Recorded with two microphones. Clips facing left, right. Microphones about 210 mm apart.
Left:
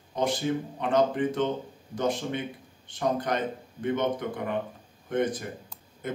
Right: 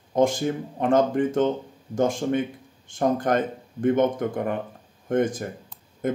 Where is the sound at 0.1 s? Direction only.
45° right (ahead or behind).